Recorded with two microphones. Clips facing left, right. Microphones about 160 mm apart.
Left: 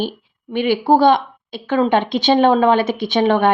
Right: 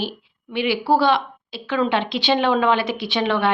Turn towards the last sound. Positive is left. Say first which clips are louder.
# left 6 dB
turn(degrees=45)  # may be behind; listen again after turning